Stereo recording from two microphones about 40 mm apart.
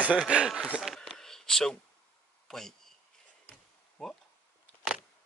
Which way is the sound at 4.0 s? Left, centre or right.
Centre.